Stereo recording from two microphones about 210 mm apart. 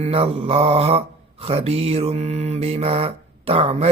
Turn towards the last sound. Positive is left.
turn(degrees=-30)  # may be behind; listen again after turning